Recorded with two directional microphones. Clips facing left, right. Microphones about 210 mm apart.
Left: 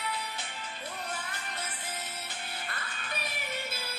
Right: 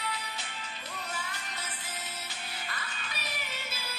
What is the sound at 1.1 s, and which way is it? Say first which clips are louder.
Music: left 1 dB; 55° left (ahead or behind).